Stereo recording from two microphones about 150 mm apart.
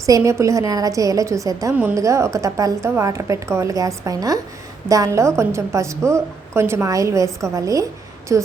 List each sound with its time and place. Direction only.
0.0 s a woman's voice: 20° right (ahead or behind)